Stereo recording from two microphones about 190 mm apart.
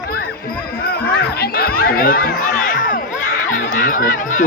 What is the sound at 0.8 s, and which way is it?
Speech, 50° left (ahead or behind).